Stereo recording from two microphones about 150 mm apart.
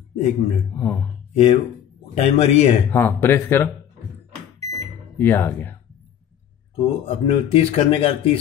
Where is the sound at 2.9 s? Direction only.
15° left (ahead or behind).